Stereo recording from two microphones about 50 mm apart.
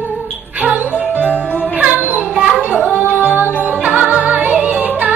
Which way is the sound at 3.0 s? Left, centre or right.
Right.